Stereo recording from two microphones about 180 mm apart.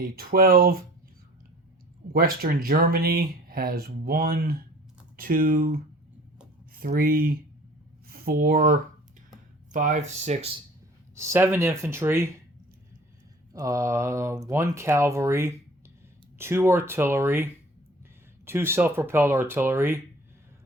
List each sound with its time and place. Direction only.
0.0 s speech: 55° right (ahead or behind)
2.1 s speech: 55° right (ahead or behind); by 10.6 s 35° right (ahead or behind)
11.1 s speech: 15° right (ahead or behind)
13.5 s speech: 20° right (ahead or behind)